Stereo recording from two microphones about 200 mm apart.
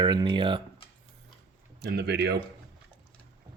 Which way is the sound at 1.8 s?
55° right (ahead or behind).